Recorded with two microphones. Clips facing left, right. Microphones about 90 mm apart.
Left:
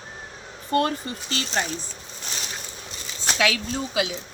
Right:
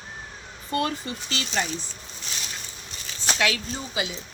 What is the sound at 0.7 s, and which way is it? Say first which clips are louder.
Speech: left 4 dB; 45° left (ahead or behind).